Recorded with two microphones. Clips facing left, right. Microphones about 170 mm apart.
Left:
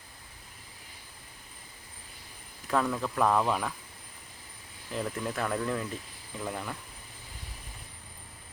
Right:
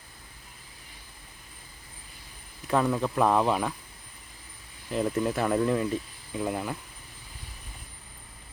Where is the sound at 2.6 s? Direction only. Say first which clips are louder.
Right 4 dB; 15° right (ahead or behind).